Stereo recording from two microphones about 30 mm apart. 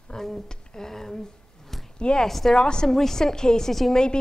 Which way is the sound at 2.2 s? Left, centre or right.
Centre.